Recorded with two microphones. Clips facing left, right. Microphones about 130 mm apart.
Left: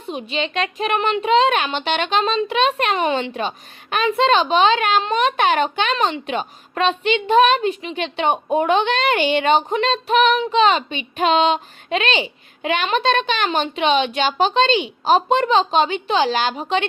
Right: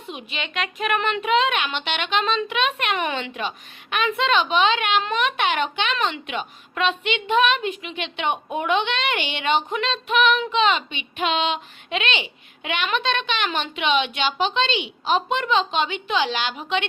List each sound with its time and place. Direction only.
0.0 s speech: 30° left (ahead or behind)